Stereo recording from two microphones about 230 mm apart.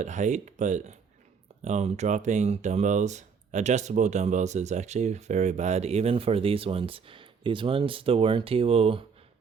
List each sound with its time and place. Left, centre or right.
0.0 s speech: right